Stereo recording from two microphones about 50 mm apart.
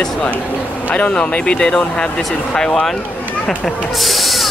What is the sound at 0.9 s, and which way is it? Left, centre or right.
Speech, left.